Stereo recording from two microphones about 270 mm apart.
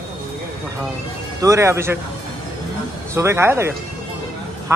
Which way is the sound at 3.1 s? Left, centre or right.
Centre.